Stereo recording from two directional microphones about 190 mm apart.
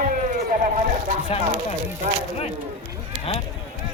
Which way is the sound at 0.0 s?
45° right (ahead or behind).